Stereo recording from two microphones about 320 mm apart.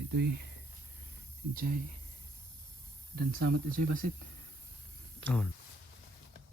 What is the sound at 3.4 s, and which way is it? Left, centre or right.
Speech, right.